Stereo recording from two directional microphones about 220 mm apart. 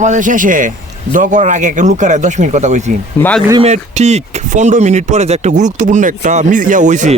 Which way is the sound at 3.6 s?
30° right (ahead or behind).